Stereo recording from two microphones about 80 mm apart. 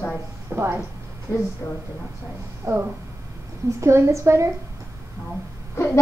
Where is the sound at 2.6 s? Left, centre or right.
Right.